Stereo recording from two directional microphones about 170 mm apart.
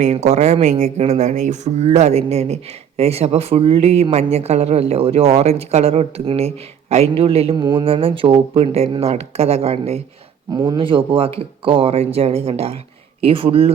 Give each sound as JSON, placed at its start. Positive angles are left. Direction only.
{"t": 0.0, "sound": "speech", "side_deg": -40}
{"t": 10.5, "sound": "speech", "side_deg": -20}